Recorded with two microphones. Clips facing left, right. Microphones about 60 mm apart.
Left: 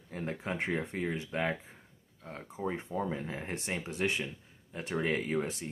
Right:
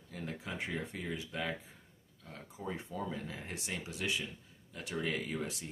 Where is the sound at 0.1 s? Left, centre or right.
Left.